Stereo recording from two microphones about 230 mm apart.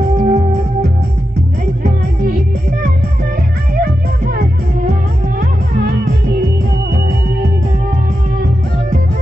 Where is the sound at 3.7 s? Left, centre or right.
Right.